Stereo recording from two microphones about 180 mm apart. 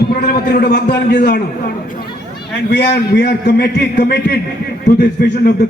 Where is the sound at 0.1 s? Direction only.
55° left (ahead or behind).